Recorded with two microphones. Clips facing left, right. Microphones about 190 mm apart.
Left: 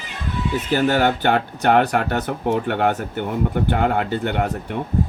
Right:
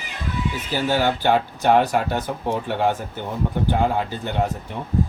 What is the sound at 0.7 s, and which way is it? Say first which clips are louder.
Speech: left 3 dB; 60° left (ahead or behind).